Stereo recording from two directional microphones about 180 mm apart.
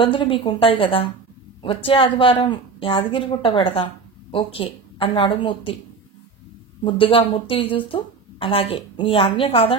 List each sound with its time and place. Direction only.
0.0 s a woman's voice: 30° left (ahead or behind)
6.8 s a woman's voice: 30° left (ahead or behind)